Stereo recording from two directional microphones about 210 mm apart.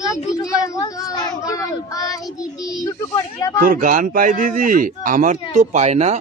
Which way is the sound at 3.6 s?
40° right (ahead or behind).